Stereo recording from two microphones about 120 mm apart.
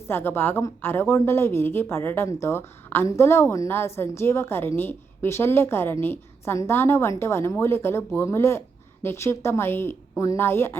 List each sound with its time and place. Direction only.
0.1 s a woman's voice: 20° left (ahead or behind)